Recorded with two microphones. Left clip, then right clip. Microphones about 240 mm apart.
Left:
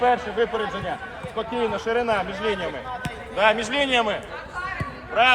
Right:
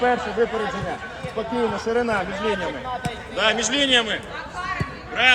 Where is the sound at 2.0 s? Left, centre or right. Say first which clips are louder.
Right 1 dB; left.